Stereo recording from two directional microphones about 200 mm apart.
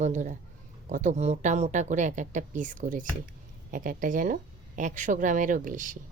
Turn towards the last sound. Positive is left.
turn(degrees=-40)  # may be behind; listen again after turning